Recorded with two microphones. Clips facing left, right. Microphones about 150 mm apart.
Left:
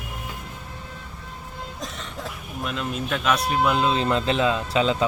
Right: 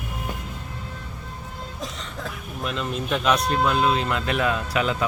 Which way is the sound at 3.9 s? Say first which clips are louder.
Left 2 dB; 30° left (ahead or behind).